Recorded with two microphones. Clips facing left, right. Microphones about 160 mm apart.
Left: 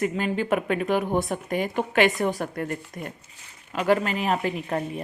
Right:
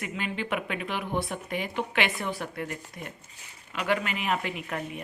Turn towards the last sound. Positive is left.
turn(degrees=35)  # may be behind; listen again after turning